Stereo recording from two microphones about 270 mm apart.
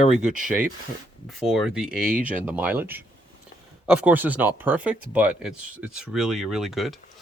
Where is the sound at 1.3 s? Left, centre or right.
Centre.